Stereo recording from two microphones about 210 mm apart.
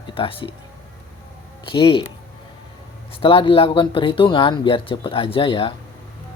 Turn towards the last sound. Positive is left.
turn(degrees=25)  # may be behind; listen again after turning